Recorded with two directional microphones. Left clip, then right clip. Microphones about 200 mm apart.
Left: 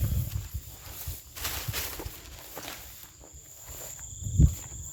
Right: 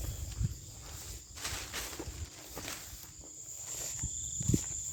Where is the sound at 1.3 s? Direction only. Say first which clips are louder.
Left 5 dB; 50° left (ahead or behind).